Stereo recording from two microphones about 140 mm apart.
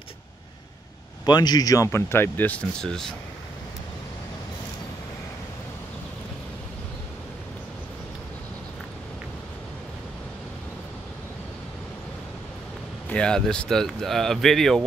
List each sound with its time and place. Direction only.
1.2 s speech: 30° left (ahead or behind); by 3.2 s 5° left (ahead or behind)
13.1 s speech: 5° left (ahead or behind)